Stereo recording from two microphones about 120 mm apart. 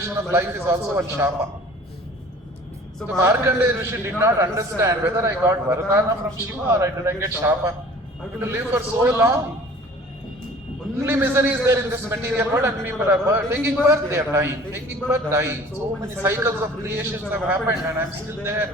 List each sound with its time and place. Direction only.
0.0 s a man's voice: 20° right (ahead or behind)
3.2 s a man's voice: 20° right (ahead or behind)
10.9 s a man's voice: 20° right (ahead or behind)